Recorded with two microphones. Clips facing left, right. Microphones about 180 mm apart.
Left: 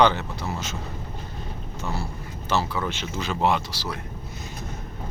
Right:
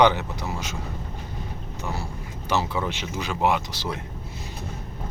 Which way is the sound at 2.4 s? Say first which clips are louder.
Even; 15° right (ahead or behind).